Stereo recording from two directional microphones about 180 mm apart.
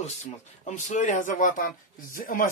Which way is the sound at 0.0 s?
40° left (ahead or behind).